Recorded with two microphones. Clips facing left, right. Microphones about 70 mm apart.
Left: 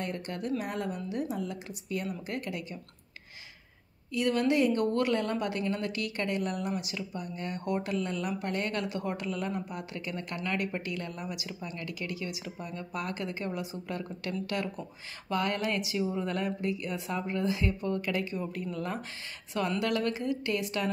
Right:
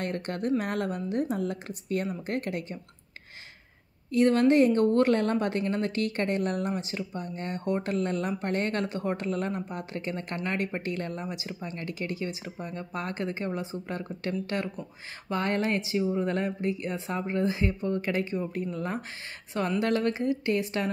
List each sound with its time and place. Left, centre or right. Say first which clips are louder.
0.0 s a woman's voice: right 4 dB; right
4.1 s speech: right 6 dB; right
6.7 s a woman's voice: right 2 dB; right